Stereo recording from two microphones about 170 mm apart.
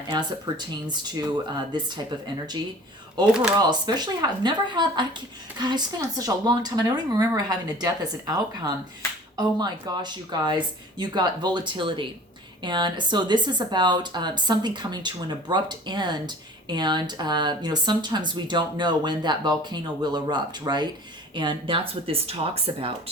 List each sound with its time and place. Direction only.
0.1 s speech: 25° right (ahead or behind)
3.2 s speech: 25° right (ahead or behind)